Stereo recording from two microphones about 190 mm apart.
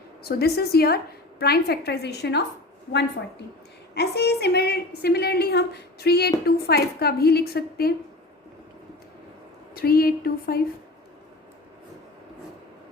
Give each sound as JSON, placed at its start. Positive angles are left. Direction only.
{"t": 0.3, "sound": "a woman's voice", "side_deg": 55}
{"t": 9.7, "sound": "speech", "side_deg": 50}